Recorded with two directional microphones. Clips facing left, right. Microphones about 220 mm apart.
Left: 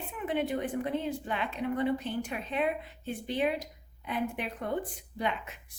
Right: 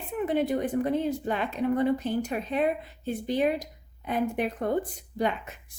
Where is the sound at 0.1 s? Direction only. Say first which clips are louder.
Right 6 dB; 40° right (ahead or behind).